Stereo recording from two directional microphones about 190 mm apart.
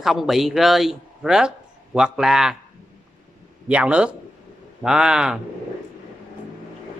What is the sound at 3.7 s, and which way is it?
A man's voice, 5° right (ahead or behind).